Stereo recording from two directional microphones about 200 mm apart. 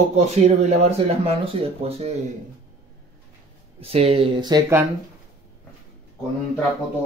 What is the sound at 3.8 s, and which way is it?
Speech, 30° right (ahead or behind).